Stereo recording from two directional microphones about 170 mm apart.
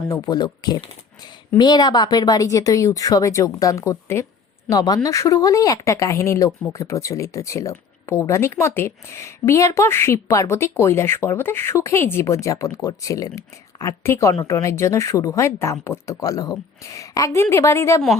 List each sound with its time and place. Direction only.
0.1 s speech: 25° left (ahead or behind)